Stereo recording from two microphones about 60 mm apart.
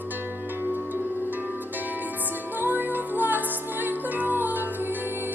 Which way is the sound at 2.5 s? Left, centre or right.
Right.